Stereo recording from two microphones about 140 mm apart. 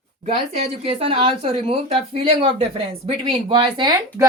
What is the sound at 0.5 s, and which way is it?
A woman's voice, 40° right (ahead or behind).